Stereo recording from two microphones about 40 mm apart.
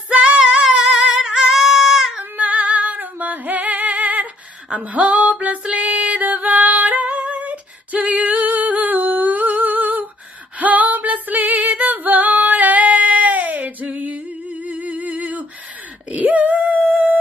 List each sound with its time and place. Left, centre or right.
0.4 s female singing: centre
1.5 s a sound: centre
2.3 s female singing: right
4.7 s music: right
10.6 s female singing: right
16.3 s a sound: right